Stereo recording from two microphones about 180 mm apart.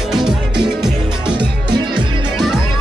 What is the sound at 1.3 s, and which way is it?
Music, 25° right (ahead or behind).